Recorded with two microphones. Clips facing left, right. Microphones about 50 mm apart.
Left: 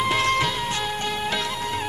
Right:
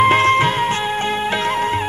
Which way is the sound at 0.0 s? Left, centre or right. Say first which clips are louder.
Right 8 dB; right.